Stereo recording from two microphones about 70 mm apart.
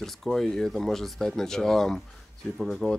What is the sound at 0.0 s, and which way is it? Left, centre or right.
A man's voice, centre.